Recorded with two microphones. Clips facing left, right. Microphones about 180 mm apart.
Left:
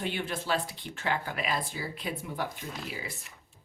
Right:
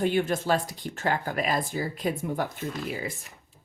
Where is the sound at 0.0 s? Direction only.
45° right (ahead or behind).